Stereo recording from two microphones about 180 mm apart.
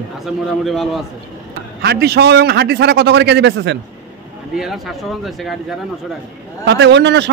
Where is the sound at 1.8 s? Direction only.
65° right (ahead or behind).